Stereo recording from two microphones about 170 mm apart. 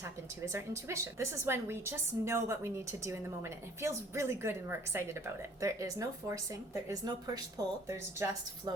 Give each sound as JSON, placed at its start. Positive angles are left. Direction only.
{"t": 0.0, "sound": "a woman's voice", "side_deg": -15}